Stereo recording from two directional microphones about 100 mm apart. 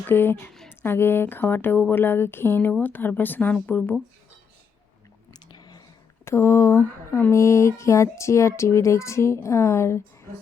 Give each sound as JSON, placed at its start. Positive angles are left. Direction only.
{"t": 0.1, "sound": "speech", "side_deg": 20}
{"t": 5.3, "sound": "squish", "side_deg": 45}
{"t": 6.2, "sound": "speech", "side_deg": 25}